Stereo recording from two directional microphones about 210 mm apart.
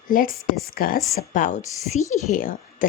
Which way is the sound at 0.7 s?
45° left (ahead or behind).